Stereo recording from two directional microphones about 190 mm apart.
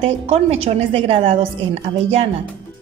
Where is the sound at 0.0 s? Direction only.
30° right (ahead or behind).